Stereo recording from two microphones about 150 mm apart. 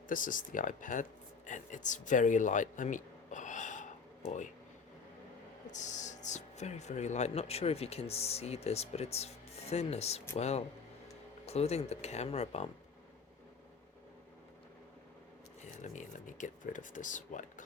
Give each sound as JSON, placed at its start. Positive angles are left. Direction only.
{"t": 0.1, "sound": "speech", "side_deg": 65}
{"t": 5.6, "sound": "speech", "side_deg": 55}
{"t": 15.6, "sound": "speech", "side_deg": 55}